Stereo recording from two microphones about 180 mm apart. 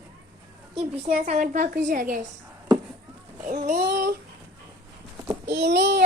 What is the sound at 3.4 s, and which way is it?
Speech, 45° right (ahead or behind).